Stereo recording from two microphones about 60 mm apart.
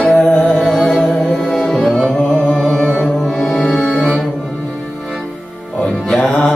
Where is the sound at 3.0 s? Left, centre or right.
Centre.